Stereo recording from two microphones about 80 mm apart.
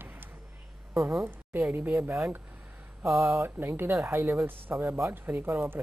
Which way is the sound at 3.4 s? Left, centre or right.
Right.